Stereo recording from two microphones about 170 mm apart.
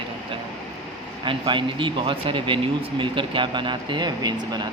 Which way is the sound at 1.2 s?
30° right (ahead or behind).